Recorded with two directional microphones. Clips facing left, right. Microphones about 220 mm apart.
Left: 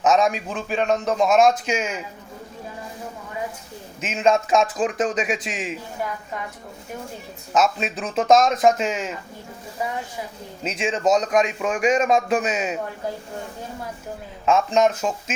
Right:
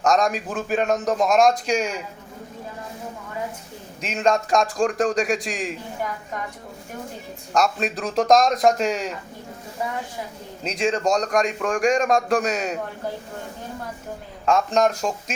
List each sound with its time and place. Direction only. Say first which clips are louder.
0.0 s a man's voice: left 1 dB; 5° left (ahead or behind)
4.0 s a man's voice: left 1 dB; 5° left (ahead or behind)
7.5 s a man's voice: left 1 dB; 5° left (ahead or behind)
10.6 s a man's voice: right 1 dB; 5° left (ahead or behind)
14.4 s a man's voice: left 1 dB; centre (ahead or behind)